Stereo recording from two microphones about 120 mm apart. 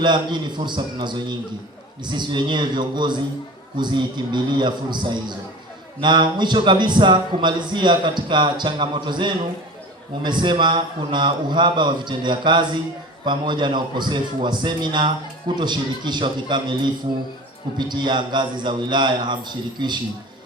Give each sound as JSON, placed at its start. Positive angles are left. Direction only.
{"t": 0.0, "sound": "a man's voice", "side_deg": -40}